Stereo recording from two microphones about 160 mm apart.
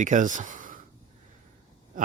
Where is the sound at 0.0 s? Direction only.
50° right (ahead or behind).